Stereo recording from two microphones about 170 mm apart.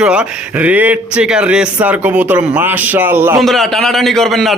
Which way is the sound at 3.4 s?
Centre (ahead or behind).